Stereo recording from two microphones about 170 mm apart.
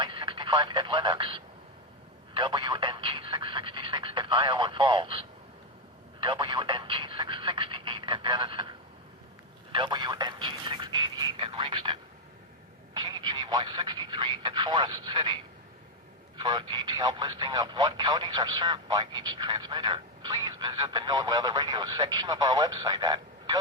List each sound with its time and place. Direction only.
0.0 s speech: 30° right (ahead or behind)
2.3 s telephone: 30° right (ahead or behind)
6.1 s telephone: 25° right (ahead or behind)
9.7 s a sound: 25° right (ahead or behind)
12.9 s speech: 25° right (ahead or behind)
16.4 s speech: 25° right (ahead or behind)